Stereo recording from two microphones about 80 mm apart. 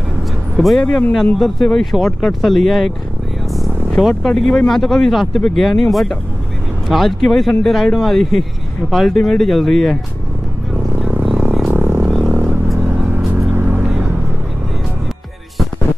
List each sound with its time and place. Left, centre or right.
0.6 s speech: centre
3.5 s vehicle: centre
4.1 s speech: centre
11.0 s music: centre
11.7 s vehicle: right